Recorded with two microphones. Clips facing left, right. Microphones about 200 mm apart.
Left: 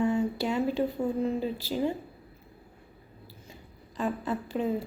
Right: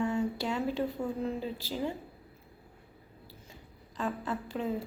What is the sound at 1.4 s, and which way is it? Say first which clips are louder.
Speech: left 5 dB; 10° left (ahead or behind).